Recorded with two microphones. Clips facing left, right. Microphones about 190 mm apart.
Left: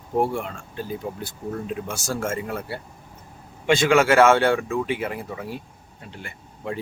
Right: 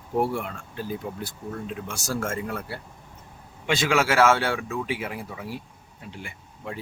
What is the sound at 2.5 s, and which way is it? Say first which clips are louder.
Speech: left 2 dB; 25° left (ahead or behind).